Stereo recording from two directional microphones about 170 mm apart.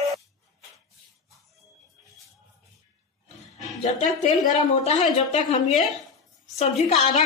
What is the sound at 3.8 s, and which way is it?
A woman's voice, 40° left (ahead or behind).